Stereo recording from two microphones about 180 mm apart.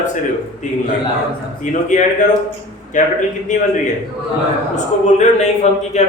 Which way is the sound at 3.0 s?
45° left (ahead or behind).